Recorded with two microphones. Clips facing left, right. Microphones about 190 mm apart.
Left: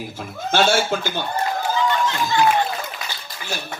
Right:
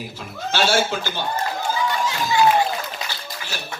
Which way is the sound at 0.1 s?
50° left (ahead or behind).